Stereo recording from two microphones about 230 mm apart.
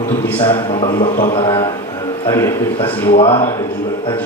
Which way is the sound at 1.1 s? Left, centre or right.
Left.